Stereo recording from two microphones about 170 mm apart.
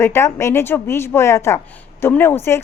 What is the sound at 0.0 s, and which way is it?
A woman's voice, 15° left (ahead or behind).